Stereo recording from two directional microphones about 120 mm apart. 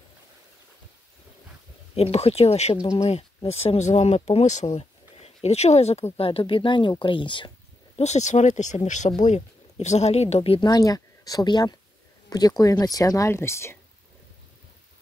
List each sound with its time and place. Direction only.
2.0 s speech: 60° left (ahead or behind)
4.7 s a sound: 60° left (ahead or behind)
6.1 s speech: 50° left (ahead or behind)
8.0 s speech: 70° left (ahead or behind); by 9.1 s 90° left
9.2 s speech: 75° left (ahead or behind); by 10.6 s 60° left (ahead or behind)
10.6 s speech: 30° left (ahead or behind)